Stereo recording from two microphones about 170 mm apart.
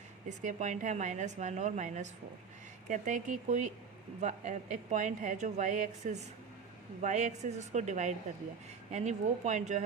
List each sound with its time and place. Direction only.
0.3 s a woman's voice: 45° right (ahead or behind)